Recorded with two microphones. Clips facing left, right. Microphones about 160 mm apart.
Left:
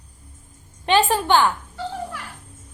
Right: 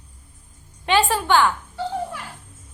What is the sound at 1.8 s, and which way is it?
Music, 20° right (ahead or behind).